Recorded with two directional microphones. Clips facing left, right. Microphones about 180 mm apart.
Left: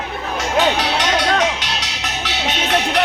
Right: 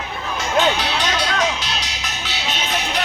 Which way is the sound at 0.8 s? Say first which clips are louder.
Left 3 dB; 75° left (ahead or behind).